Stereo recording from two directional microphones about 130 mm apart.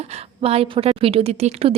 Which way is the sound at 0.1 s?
50° right (ahead or behind).